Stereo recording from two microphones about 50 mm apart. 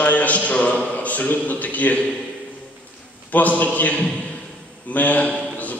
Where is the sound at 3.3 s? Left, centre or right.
Left.